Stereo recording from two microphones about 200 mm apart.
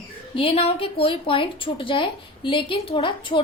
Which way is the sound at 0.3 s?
30° left (ahead or behind).